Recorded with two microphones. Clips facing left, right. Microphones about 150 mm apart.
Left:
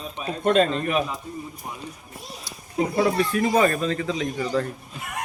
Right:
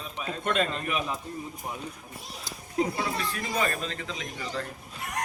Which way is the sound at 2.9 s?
45° left (ahead or behind).